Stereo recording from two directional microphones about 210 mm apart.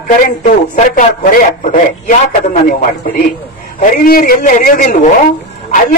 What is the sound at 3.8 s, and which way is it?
A man's voice, 40° left (ahead or behind).